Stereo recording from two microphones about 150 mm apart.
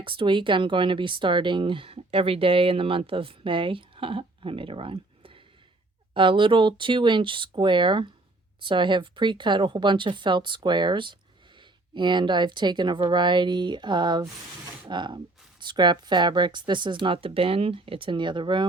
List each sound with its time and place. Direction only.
0.0 s speech: 35° right (ahead or behind)